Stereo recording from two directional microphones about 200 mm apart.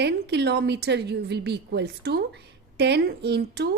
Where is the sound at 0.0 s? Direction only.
55° right (ahead or behind).